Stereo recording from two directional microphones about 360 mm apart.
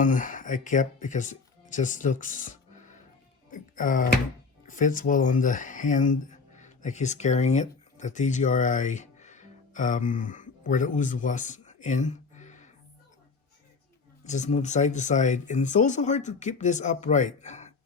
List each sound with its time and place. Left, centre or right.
0.0 s speech: left
14.3 s speech: centre